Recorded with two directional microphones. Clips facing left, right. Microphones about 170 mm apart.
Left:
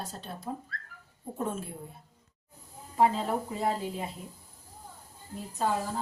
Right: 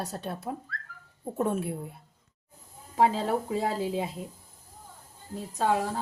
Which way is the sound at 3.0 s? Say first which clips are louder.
Right 1 dB; 90° right.